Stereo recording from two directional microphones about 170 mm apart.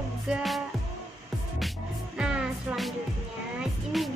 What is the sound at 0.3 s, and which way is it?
Music, centre (ahead or behind).